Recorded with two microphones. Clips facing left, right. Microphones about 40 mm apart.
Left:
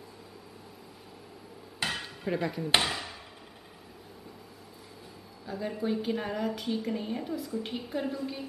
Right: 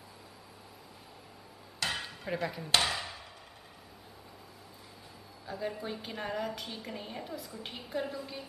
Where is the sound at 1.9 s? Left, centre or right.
Centre.